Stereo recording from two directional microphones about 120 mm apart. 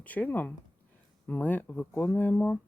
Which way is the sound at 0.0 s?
15° left (ahead or behind).